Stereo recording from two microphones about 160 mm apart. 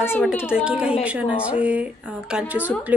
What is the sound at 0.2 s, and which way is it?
Speech, 10° left (ahead or behind).